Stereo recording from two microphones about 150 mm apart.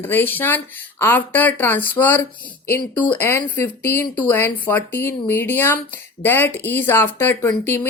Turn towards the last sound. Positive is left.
turn(degrees=15)  # may be behind; listen again after turning